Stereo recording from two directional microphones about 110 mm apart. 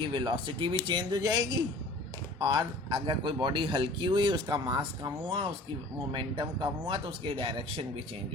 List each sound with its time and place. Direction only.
0.1 s speech: 45° right (ahead or behind)
2.4 s speech: 40° right (ahead or behind)